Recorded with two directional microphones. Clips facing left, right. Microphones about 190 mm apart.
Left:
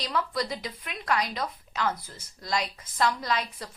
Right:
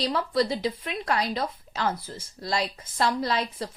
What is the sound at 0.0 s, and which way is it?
A woman's voice, 30° right (ahead or behind).